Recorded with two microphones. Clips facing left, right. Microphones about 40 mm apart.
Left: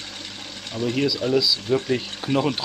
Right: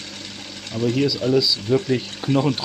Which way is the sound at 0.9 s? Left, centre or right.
Centre.